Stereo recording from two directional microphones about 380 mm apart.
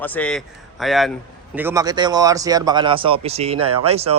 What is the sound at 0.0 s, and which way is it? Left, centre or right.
A man's voice, centre.